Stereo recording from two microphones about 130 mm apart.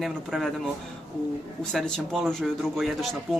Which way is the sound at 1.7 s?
5° left (ahead or behind).